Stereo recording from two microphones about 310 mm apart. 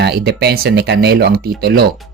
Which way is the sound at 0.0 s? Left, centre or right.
Right.